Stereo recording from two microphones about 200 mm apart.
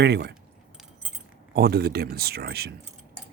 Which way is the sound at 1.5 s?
50° right (ahead or behind).